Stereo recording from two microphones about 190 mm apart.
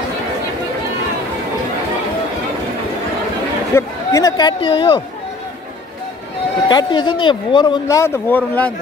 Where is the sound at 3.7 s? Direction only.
15° left (ahead or behind).